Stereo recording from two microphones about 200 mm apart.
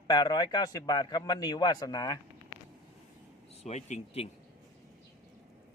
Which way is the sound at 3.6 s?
35° left (ahead or behind).